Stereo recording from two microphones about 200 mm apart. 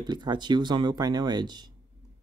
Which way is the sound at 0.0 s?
20° right (ahead or behind).